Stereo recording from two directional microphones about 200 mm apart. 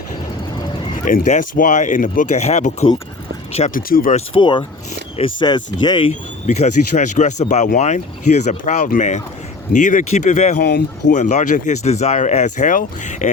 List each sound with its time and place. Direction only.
1.0 s speech: 40° left (ahead or behind)
3.8 s speech: 45° left (ahead or behind)
4.4 s speech: 25° left (ahead or behind)
6.6 s speech: 40° left (ahead or behind)
10.6 s speech: 50° left (ahead or behind)
11.1 s speech: 35° left (ahead or behind)